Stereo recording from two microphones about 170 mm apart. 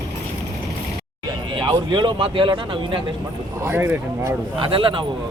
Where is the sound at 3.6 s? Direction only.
15° right (ahead or behind).